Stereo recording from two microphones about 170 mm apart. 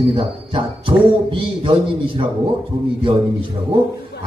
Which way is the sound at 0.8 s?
30° right (ahead or behind).